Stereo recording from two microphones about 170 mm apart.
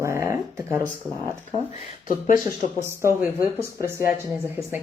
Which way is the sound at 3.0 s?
15° right (ahead or behind).